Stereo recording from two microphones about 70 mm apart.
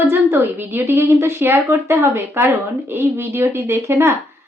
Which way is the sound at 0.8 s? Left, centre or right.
Right.